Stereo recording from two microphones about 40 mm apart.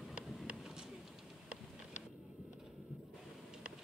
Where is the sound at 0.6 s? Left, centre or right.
Centre.